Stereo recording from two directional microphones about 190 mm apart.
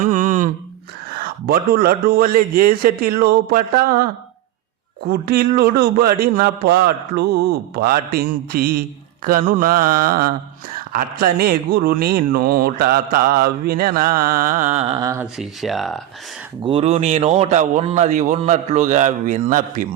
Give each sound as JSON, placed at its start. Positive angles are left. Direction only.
{"t": 0.0, "sound": "a sound", "side_deg": -40}
{"t": 1.1, "sound": "speech", "side_deg": -50}
{"t": 5.3, "sound": "speech", "side_deg": -55}
{"t": 14.9, "sound": "speech", "side_deg": -15}
{"t": 15.4, "sound": "speech", "side_deg": 0}
{"t": 16.6, "sound": "a man's voice", "side_deg": -30}